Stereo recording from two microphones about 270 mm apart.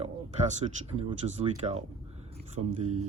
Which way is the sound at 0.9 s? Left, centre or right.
Right.